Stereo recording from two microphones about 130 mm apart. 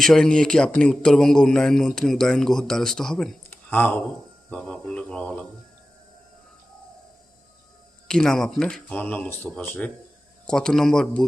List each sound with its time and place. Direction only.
0.0 s a man's voice: 5° left (ahead or behind)
3.5 s a sound: 15° left (ahead or behind)
4.4 s speech: 10° left (ahead or behind)
8.0 s a man's voice: 5° left (ahead or behind)